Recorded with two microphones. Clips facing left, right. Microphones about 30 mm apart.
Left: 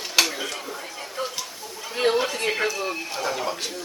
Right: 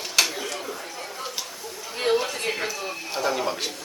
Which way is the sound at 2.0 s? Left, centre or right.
Left.